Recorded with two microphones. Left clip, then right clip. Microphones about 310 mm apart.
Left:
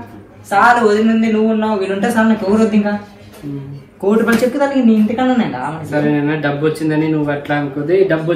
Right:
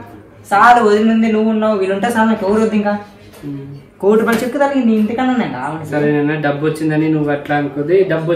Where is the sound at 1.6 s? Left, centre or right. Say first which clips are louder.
Right 2 dB; centre.